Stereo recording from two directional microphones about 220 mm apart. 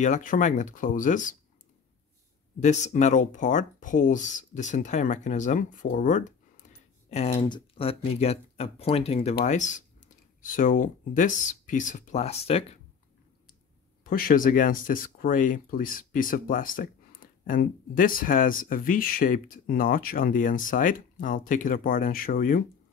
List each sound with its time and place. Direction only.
0.0 s speech: 35° left (ahead or behind)
2.6 s speech: 30° left (ahead or behind)
14.0 s speech: 40° left (ahead or behind)